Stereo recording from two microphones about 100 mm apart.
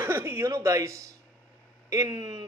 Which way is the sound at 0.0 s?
20° right (ahead or behind).